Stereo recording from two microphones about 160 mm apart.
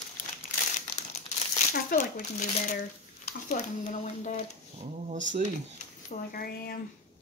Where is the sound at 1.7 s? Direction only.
55° left (ahead or behind).